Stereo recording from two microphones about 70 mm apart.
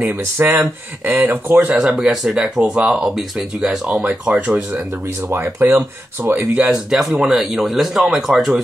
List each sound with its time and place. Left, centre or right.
0.0 s speech: right
1.8 s speech: centre
5.3 s speech: right
6.5 s speech: centre
6.9 s speech: centre